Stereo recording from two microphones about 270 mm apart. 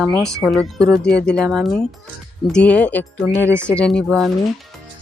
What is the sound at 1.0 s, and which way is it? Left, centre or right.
Speech, left.